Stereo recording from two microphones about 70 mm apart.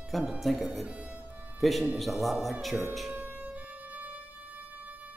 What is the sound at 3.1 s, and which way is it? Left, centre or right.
Music, right.